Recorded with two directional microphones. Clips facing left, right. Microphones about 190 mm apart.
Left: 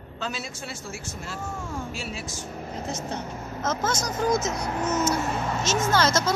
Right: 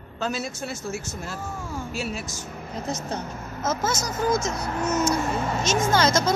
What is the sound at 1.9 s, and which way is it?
Speech, 40° right (ahead or behind).